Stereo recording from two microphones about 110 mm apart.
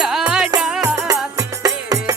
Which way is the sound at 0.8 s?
30° right (ahead or behind).